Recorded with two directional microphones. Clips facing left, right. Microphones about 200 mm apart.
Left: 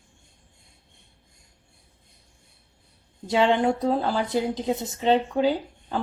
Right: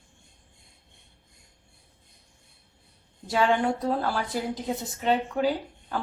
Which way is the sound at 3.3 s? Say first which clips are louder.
Left 3 dB; 25° left (ahead or behind).